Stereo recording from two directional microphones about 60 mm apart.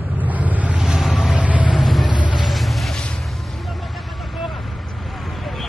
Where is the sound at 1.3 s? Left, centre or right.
Right.